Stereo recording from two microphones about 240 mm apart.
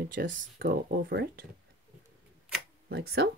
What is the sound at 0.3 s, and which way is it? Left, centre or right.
Speech, right.